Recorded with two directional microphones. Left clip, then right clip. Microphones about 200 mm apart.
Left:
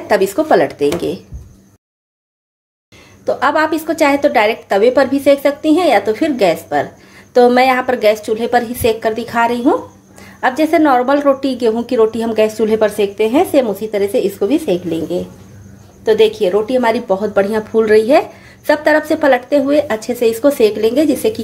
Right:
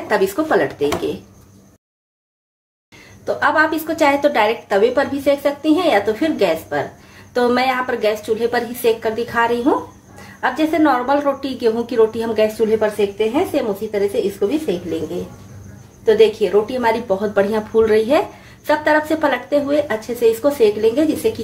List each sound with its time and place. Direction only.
0.1 s a woman's voice: 35° left (ahead or behind)
3.3 s a woman's voice: 30° left (ahead or behind)
16.2 s a woman's voice: 35° left (ahead or behind)